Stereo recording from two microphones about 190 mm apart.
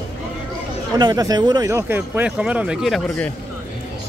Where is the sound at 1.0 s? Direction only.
20° right (ahead or behind); by 3.3 s centre (ahead or behind).